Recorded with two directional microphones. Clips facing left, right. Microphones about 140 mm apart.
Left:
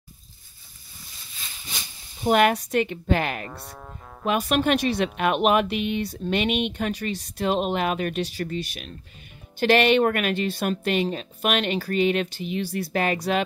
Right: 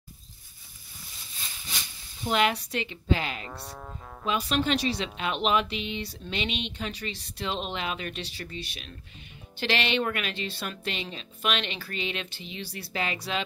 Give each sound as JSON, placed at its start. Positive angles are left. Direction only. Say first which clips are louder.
{"t": 2.2, "sound": "speech", "louder": "left 6 dB", "side_deg": 50}